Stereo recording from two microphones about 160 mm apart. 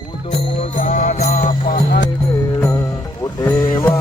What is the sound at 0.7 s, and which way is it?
Music, 60° left (ahead or behind).